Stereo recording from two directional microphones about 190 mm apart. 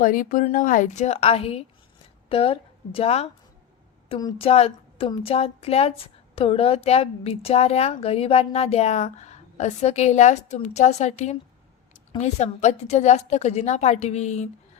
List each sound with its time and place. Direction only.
0.0 s a woman's voice: 45° left (ahead or behind)